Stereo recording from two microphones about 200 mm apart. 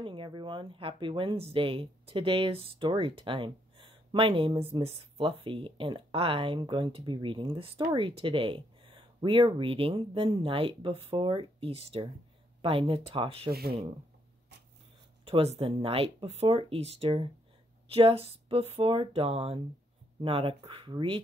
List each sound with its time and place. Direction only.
0.0 s speech: 25° right (ahead or behind)
13.5 s speech: 50° right (ahead or behind)
15.2 s speech: 30° right (ahead or behind)